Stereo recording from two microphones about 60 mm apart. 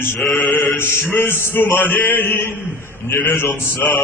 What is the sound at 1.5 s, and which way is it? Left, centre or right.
Mantra, left.